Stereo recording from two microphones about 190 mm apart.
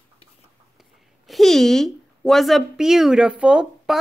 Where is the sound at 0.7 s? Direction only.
Centre (ahead or behind).